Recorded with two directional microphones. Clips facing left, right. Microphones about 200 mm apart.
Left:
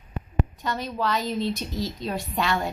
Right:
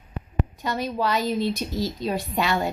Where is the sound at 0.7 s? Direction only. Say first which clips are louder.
Right 4 dB; 5° right (ahead or behind).